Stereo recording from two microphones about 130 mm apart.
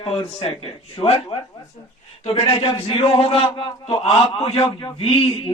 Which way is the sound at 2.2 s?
45° left (ahead or behind).